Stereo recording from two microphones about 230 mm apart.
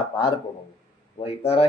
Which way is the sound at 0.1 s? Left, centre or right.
Centre.